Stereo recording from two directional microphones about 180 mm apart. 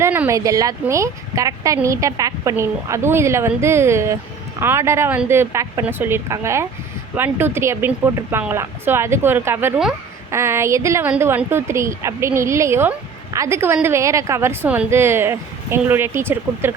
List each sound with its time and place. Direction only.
0.0 s speech: 10° right (ahead or behind)